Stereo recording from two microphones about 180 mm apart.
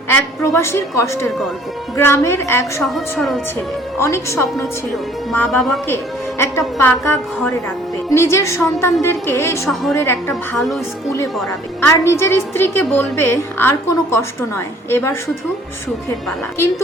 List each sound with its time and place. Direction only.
0.1 s a woman's voice: 15° left (ahead or behind)
2.8 s a woman's voice: centre (ahead or behind)
4.0 s a woman's voice: 15° left (ahead or behind)
5.5 s a woman's voice: centre (ahead or behind)
6.4 s a woman's voice: 15° left (ahead or behind)
10.6 s a woman's voice: centre (ahead or behind)
11.8 s a woman's voice: 15° left (ahead or behind)